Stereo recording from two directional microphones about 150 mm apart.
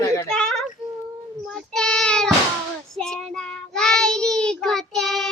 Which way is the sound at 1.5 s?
5° left (ahead or behind).